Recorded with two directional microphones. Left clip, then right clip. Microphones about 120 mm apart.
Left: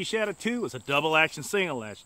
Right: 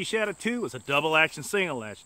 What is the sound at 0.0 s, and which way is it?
Speech, 15° right (ahead or behind).